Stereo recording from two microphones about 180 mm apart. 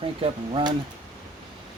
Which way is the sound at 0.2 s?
25° right (ahead or behind).